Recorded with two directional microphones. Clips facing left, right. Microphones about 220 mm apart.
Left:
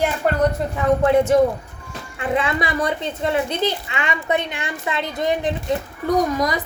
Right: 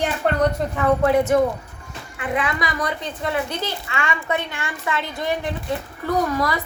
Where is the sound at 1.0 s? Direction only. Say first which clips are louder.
Left 3 dB; 30° left (ahead or behind).